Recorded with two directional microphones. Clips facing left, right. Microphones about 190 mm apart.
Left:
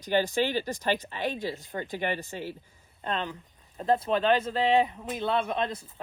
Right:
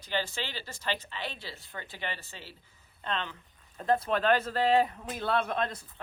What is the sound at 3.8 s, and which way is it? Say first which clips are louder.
Speech: left 2 dB; 25° left (ahead or behind).